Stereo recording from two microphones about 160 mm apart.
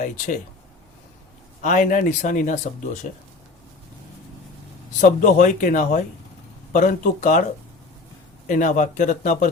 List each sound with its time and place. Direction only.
1.6 s speech: 50° left (ahead or behind)
4.9 s speech: 55° left (ahead or behind)
8.4 s speech: 55° left (ahead or behind)